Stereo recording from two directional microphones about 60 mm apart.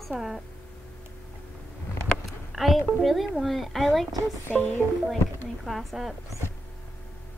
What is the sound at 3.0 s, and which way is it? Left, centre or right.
A woman's voice, centre.